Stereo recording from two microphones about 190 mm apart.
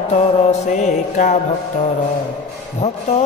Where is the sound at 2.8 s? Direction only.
35° left (ahead or behind).